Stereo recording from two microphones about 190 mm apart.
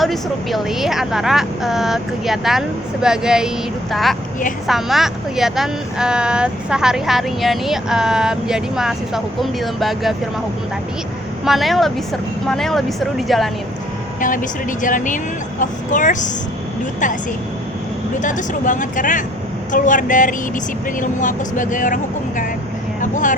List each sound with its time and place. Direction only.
0.0 s speech: centre (ahead or behind)
11.4 s speech: centre (ahead or behind)
14.2 s speech: 45° left (ahead or behind)
18.2 s speech: 40° left (ahead or behind)
23.0 s vehicle: 40° left (ahead or behind)